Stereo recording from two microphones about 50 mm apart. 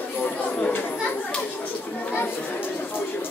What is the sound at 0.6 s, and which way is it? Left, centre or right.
Chatter, left.